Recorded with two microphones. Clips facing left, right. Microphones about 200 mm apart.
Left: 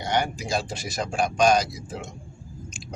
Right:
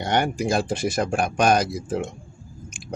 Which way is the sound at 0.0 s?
55° right (ahead or behind).